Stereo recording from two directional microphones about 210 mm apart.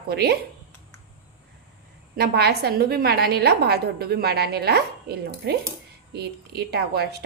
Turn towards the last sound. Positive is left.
turn(degrees=-50)  # may be behind; listen again after turning